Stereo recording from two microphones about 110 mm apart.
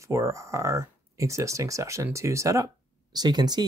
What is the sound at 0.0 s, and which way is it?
Speech, 25° right (ahead or behind).